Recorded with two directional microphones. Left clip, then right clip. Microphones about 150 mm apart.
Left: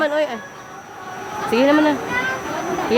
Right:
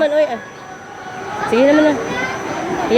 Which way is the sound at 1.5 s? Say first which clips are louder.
Right 3 dB; 15° left (ahead or behind).